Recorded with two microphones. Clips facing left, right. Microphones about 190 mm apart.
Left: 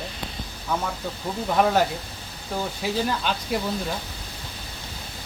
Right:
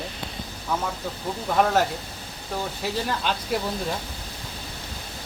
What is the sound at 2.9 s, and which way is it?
Speech, centre (ahead or behind).